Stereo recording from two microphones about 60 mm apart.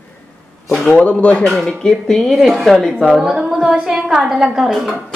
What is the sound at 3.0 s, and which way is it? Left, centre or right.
A woman's voice, centre.